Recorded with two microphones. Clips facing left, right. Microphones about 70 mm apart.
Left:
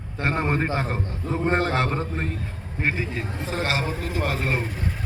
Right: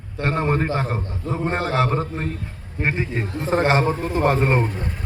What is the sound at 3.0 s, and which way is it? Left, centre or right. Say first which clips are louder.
A man's voice: right 4 dB; right.